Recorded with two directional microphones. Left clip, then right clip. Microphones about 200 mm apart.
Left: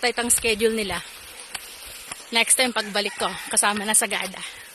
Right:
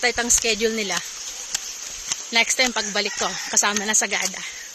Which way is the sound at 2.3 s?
15° left (ahead or behind).